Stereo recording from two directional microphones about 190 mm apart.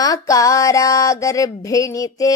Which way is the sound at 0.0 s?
20° left (ahead or behind).